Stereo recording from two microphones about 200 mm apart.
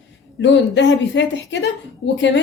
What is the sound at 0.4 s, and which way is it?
A woman's voice, 65° left (ahead or behind).